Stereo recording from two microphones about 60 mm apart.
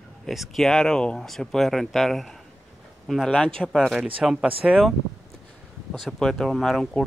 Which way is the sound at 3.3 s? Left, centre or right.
Centre.